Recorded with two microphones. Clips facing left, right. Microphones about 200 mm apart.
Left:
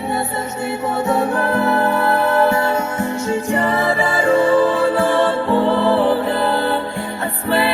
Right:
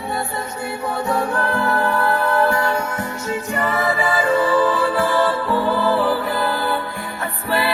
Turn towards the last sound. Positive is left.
turn(degrees=25)  # may be behind; listen again after turning